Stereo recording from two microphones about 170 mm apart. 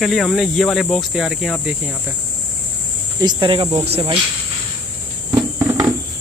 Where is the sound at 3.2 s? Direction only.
30° right (ahead or behind).